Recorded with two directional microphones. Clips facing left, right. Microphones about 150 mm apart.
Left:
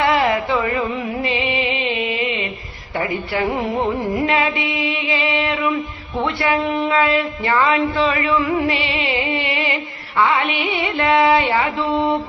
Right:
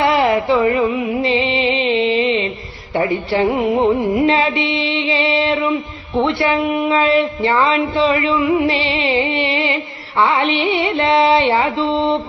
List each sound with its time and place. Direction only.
0.0 s music: 25° right (ahead or behind)
2.9 s speech: 25° right (ahead or behind)
4.1 s mantra: 25° right (ahead or behind)
6.2 s speech: 25° right (ahead or behind)
8.6 s music: 35° right (ahead or behind)